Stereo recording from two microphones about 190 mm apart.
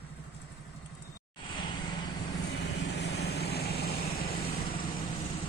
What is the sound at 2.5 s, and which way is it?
Vehicle, 65° left (ahead or behind).